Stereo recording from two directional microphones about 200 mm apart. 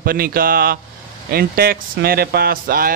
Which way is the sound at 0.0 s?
45° right (ahead or behind).